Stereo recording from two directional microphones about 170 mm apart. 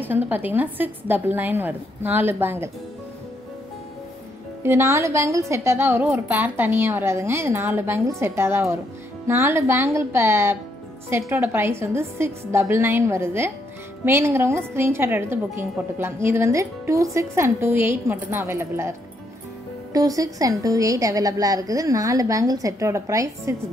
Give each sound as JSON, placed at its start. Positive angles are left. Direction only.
{"t": 0.0, "sound": "a woman's voice", "side_deg": -10}
{"t": 4.6, "sound": "a woman's voice", "side_deg": -15}